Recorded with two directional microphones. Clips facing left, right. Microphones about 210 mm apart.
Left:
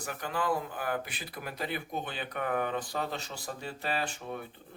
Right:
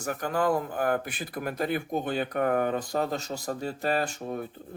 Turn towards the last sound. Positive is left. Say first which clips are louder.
# right 6 dB
turn(degrees=-40)  # may be behind; listen again after turning